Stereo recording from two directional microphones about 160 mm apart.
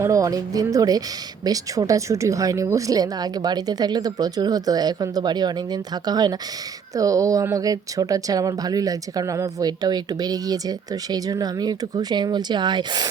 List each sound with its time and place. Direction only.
0.0 s speech: 20° right (ahead or behind)